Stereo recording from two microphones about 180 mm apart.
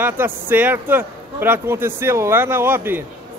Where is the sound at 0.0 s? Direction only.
10° right (ahead or behind).